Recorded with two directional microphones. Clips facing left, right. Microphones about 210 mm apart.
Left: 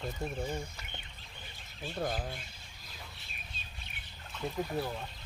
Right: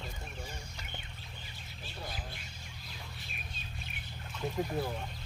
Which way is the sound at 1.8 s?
50° left (ahead or behind).